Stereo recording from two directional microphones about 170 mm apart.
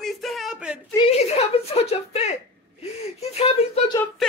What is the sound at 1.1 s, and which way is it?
Speech, 35° left (ahead or behind).